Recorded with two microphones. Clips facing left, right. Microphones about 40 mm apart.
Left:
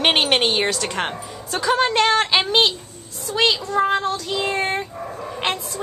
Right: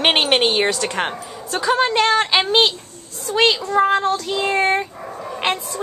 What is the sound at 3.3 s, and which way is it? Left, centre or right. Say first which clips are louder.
A child's voice: right 3 dB; centre.